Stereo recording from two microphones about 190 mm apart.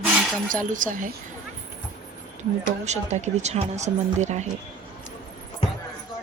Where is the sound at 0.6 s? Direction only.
45° right (ahead or behind).